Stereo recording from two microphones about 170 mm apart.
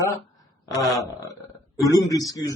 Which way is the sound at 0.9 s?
20° left (ahead or behind).